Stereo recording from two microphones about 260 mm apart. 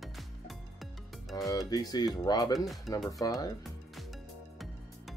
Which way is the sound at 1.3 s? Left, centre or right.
Centre.